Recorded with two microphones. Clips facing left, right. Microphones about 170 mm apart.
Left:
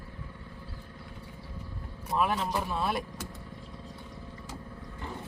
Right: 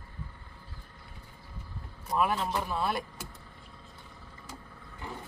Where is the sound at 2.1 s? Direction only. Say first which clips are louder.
Even; centre (ahead or behind).